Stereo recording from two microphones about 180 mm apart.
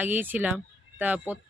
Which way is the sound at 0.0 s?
10° right (ahead or behind).